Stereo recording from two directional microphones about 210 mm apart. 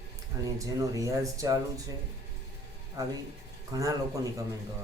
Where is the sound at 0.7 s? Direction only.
15° right (ahead or behind).